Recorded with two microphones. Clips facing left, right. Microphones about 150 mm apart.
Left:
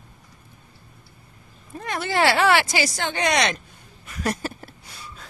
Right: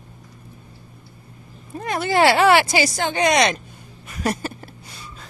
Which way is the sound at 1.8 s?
15° right (ahead or behind).